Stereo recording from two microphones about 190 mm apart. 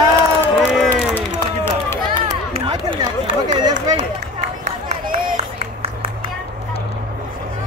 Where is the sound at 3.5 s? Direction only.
20° right (ahead or behind).